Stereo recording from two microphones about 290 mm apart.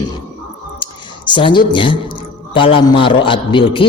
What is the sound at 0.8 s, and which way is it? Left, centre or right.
Clicking, centre.